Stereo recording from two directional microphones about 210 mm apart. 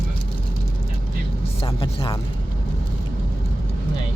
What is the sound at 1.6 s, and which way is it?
Speech, 20° left (ahead or behind).